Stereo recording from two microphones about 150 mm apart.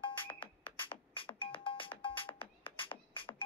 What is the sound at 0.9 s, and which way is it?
Music, 35° left (ahead or behind).